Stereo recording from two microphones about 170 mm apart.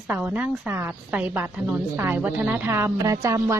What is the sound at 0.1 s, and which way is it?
A woman's voice, 10° right (ahead or behind).